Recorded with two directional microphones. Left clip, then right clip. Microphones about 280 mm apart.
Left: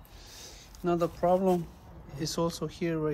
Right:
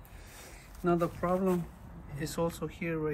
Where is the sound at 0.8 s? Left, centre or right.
Centre.